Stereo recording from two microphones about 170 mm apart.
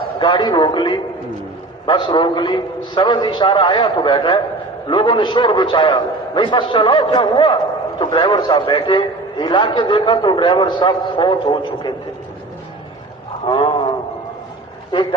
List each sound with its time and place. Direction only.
0.2 s a man's voice: 25° left (ahead or behind)
13.4 s roaring cats: 30° left (ahead or behind)